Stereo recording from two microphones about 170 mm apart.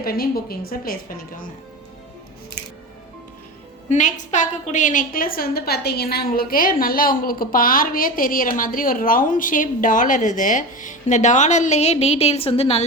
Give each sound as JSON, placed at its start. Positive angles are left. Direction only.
{"t": 0.0, "sound": "a woman's voice", "side_deg": 60}
{"t": 2.6, "sound": "music", "side_deg": 70}
{"t": 3.8, "sound": "a woman's voice", "side_deg": 45}